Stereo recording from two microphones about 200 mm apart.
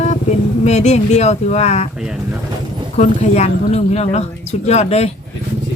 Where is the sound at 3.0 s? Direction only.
35° left (ahead or behind).